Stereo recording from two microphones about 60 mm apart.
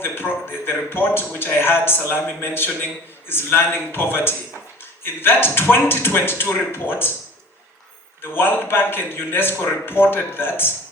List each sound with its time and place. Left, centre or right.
0.0 s a man's voice: left
8.2 s a man's voice: left